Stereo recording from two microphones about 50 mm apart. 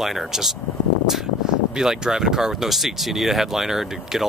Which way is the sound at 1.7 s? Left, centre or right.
Centre.